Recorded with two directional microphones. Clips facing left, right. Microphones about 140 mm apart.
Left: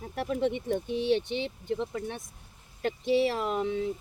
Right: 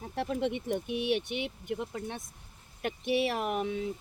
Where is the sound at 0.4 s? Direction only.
20° right (ahead or behind).